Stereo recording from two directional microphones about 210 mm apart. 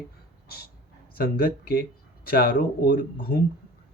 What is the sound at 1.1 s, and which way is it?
Speech, 45° left (ahead or behind).